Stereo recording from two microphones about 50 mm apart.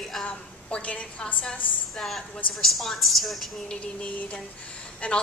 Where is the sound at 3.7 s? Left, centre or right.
Left.